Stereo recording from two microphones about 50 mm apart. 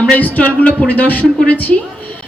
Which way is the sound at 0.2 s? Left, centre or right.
Left.